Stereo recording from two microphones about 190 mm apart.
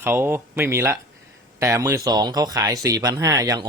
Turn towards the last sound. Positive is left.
turn(degrees=-20)  # may be behind; listen again after turning